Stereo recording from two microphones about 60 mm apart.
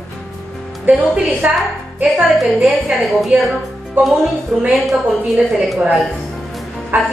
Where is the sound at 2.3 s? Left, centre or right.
Centre.